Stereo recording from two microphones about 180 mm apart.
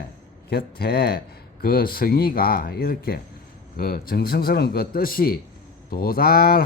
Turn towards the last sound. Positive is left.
turn(degrees=55)  # may be behind; listen again after turning